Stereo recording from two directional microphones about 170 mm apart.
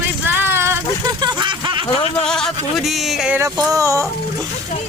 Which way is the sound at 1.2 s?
25° right (ahead or behind).